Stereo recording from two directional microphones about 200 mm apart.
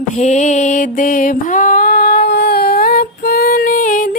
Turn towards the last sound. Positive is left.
turn(degrees=40)  # may be behind; listen again after turning